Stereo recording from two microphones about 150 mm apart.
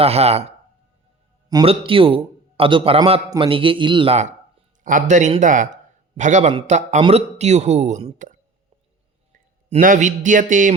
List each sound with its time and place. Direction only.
0.0 s speech: 45° right (ahead or behind)
1.6 s a man's voice: 35° right (ahead or behind)
4.8 s a man's voice: 60° right (ahead or behind)
9.8 s speech: 55° right (ahead or behind)